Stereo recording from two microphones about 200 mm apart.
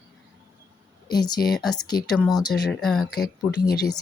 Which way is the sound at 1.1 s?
20° left (ahead or behind).